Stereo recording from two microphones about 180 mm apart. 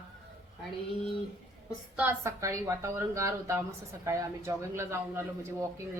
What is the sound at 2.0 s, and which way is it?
Speech, 10° right (ahead or behind).